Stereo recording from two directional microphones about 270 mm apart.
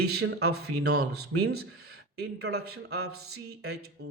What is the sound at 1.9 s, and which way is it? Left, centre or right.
Speech, right.